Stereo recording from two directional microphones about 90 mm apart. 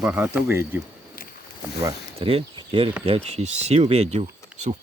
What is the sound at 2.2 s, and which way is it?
Speech, 90° right.